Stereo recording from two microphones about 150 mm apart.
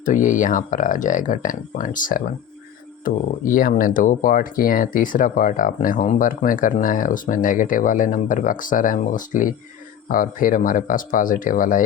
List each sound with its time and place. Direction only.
0.0 s speech: 60° left (ahead or behind)